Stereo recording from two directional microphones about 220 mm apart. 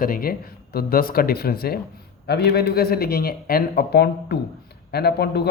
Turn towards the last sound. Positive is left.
turn(degrees=45)  # may be behind; listen again after turning